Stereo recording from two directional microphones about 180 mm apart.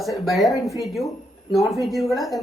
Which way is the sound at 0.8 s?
Centre (ahead or behind).